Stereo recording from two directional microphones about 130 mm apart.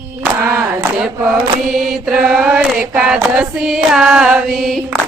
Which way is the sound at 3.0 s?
5° right (ahead or behind).